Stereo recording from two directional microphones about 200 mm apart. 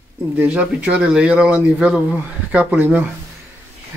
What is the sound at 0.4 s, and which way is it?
Speech, 5° right (ahead or behind).